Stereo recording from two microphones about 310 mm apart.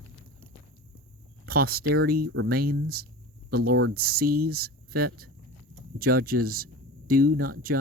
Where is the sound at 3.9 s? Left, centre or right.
Right.